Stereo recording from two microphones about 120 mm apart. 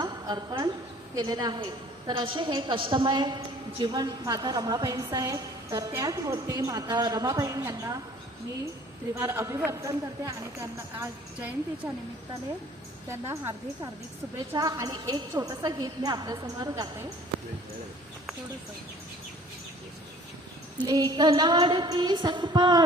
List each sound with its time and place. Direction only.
0.0 s a sound: 35° right (ahead or behind)
1.1 s a woman's voice: 35° right (ahead or behind)
9.1 s speech: 25° right (ahead or behind)
11.3 s a woman's voice: 10° right (ahead or behind)
13.1 s speech: 20° right (ahead or behind)
14.5 s a woman's voice: 30° right (ahead or behind)
20.8 s a woman's voice: 35° right (ahead or behind)